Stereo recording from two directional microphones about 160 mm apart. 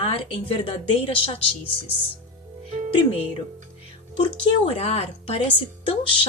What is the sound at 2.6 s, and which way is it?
Music, 45° right (ahead or behind).